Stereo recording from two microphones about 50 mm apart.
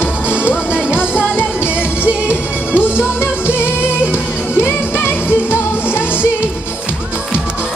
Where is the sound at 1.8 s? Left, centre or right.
Right.